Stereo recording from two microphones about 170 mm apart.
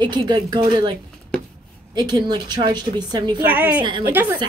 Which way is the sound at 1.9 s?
25° right (ahead or behind).